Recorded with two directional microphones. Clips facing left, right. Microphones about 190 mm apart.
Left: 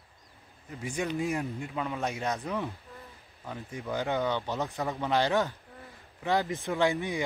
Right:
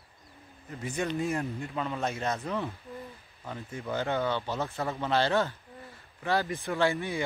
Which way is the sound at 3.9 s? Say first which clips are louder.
Even; 15° left (ahead or behind).